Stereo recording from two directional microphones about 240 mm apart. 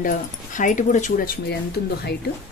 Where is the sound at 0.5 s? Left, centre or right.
Left.